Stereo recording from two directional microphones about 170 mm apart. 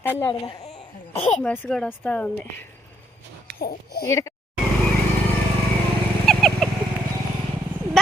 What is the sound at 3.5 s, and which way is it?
Speech, 70° left (ahead or behind).